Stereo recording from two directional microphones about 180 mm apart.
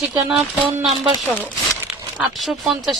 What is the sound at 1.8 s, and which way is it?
Speech, 5° right (ahead or behind).